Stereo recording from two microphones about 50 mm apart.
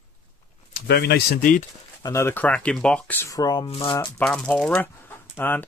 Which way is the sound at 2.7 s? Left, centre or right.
Centre.